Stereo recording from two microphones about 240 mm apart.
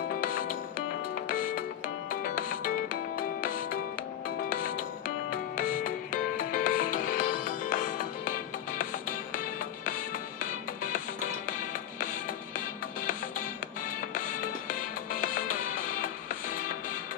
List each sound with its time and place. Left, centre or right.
1.3 s music: left
15.2 s music: left